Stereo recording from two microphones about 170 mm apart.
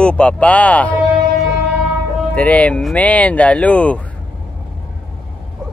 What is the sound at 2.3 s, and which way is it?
Speech, 10° left (ahead or behind).